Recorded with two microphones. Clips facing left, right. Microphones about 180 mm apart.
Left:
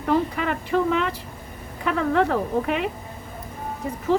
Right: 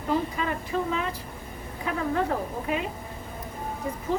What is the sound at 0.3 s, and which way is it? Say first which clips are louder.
A woman's voice: left 5 dB; 70° left (ahead or behind).